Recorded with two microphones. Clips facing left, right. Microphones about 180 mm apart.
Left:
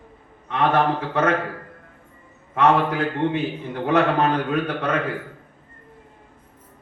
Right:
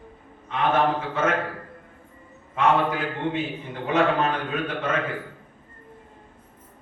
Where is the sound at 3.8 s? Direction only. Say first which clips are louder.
Left 3 dB; 65° left (ahead or behind).